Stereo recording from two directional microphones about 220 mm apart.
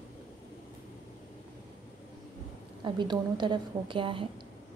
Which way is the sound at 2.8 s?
20° right (ahead or behind).